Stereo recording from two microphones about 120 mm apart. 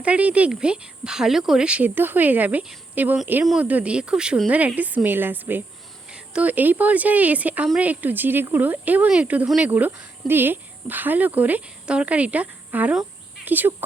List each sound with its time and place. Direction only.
0.0 s speech: 10° right (ahead or behind)